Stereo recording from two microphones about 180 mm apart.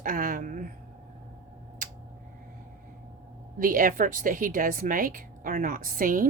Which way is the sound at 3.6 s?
50° right (ahead or behind).